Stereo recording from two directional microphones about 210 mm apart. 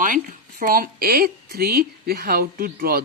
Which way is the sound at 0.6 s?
45° right (ahead or behind).